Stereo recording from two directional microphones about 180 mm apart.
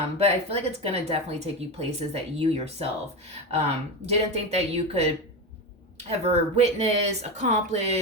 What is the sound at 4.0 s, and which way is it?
Speech, 35° right (ahead or behind).